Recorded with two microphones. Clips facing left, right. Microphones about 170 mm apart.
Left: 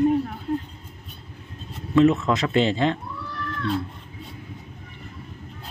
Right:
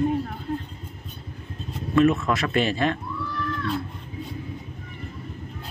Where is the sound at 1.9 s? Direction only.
20° left (ahead or behind).